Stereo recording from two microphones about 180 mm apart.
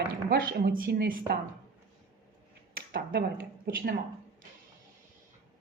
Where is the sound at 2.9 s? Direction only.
60° right (ahead or behind).